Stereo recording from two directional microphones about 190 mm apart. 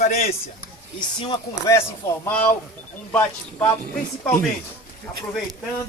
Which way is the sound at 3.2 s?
20° left (ahead or behind).